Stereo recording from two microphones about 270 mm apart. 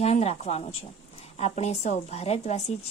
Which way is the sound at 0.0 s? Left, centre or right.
Left.